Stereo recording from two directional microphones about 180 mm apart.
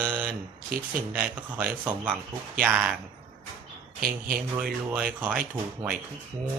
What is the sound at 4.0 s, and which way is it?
Speech, 50° right (ahead or behind).